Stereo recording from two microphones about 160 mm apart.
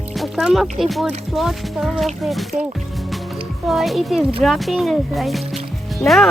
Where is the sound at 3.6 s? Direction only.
Centre (ahead or behind).